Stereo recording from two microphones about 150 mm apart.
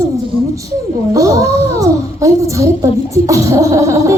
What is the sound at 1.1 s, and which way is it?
Speech, 20° right (ahead or behind).